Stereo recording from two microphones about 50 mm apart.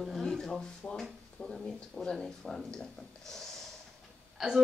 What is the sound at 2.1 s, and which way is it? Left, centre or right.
Speech, centre.